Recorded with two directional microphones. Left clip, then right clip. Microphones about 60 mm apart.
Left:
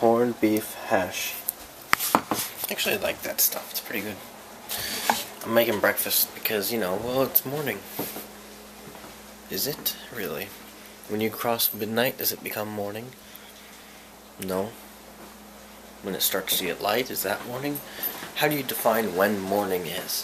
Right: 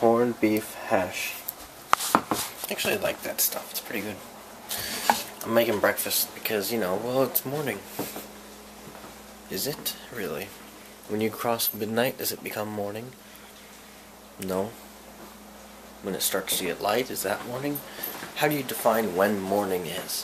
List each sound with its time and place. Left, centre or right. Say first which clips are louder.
0.0 s a sound: left 1 dB; centre
0.6 s speech: left 1 dB; centre
2.6 s speech: left 1 dB; centre
4.7 s mechanisms: left 2 dB; centre
5.4 s speech: left 3 dB; centre
9.5 s speech: left 1 dB; centre
14.4 s speech: even; centre
16.1 s speech: left 1 dB; centre